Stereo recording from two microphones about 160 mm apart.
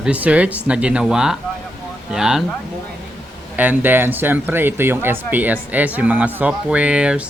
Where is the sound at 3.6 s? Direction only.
10° right (ahead or behind).